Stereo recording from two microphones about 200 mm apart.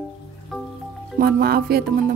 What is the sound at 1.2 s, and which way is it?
Speech, 50° right (ahead or behind).